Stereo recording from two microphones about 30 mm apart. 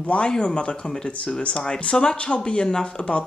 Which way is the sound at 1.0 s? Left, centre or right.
Left.